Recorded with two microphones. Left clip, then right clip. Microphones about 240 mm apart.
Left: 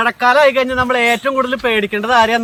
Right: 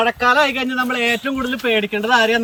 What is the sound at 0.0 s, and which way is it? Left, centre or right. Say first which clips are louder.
Speech: left 4 dB; centre.